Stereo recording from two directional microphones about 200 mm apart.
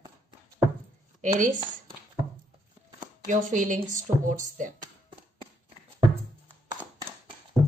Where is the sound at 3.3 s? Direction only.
40° right (ahead or behind).